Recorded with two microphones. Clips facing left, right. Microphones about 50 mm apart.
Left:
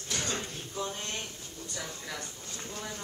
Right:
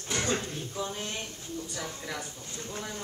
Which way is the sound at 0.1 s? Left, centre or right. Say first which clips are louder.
Right 5 dB; right.